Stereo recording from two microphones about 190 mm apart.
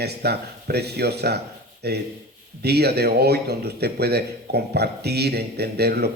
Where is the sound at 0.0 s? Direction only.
60° right (ahead or behind).